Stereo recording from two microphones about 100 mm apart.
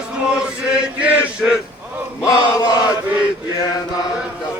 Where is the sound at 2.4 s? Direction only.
40° left (ahead or behind).